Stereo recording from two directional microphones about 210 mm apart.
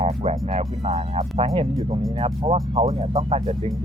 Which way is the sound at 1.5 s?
20° right (ahead or behind).